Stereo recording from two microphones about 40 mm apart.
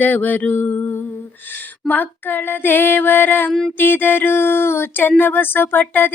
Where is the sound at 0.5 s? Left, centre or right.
Left.